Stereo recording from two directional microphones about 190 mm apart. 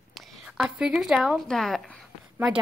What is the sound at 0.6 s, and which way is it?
A woman's voice, 5° right (ahead or behind).